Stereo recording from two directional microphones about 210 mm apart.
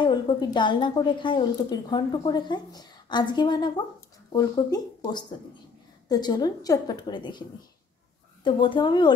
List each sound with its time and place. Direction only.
0.0 s a woman's voice: 20° left (ahead or behind)
8.5 s a woman's voice: 25° left (ahead or behind)